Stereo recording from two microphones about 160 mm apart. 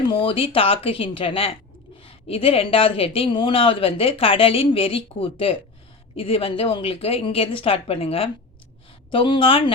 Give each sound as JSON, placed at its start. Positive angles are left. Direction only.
{"t": 0.1, "sound": "speech", "side_deg": 35}